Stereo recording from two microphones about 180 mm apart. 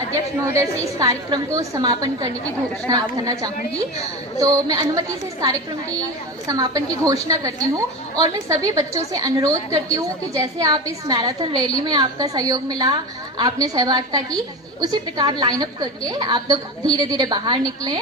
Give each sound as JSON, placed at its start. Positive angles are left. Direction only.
{"t": 0.1, "sound": "a woman's voice", "side_deg": -15}